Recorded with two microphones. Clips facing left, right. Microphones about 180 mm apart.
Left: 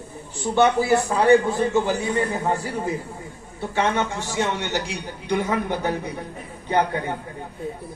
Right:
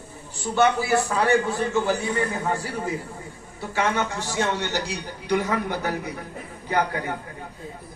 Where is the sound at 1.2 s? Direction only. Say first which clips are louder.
Left 5 dB; 15° left (ahead or behind).